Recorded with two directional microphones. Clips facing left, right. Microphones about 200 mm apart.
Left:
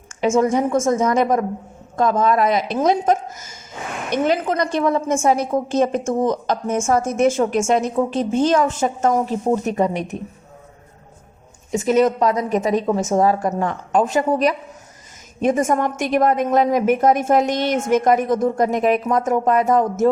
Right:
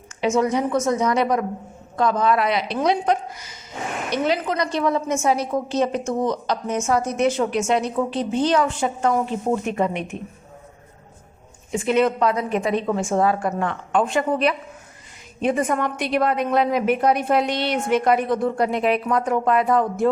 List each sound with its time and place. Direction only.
0.2 s a woman's voice: 45° left (ahead or behind)
11.7 s a woman's voice: 40° left (ahead or behind)